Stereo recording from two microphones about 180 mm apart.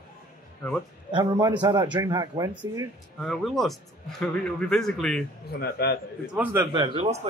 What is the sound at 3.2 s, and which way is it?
A man's voice, centre (ahead or behind).